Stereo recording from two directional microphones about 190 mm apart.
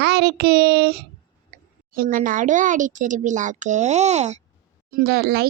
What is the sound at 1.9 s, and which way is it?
Speech, 45° right (ahead or behind).